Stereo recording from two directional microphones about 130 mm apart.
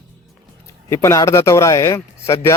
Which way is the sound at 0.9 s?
25° left (ahead or behind).